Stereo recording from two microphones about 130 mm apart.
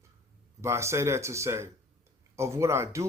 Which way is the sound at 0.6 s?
20° right (ahead or behind).